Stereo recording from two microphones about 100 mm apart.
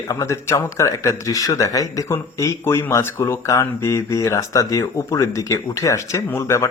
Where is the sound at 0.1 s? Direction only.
30° left (ahead or behind).